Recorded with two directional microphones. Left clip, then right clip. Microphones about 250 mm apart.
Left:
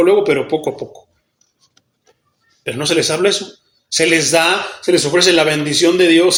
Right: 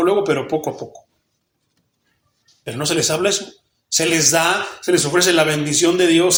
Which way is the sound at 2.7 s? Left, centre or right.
Right.